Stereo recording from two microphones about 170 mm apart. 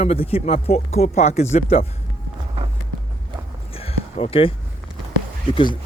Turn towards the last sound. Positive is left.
turn(degrees=30)  # may be behind; listen again after turning